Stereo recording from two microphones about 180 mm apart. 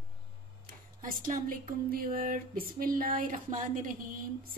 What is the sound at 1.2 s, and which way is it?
Speech, 50° right (ahead or behind).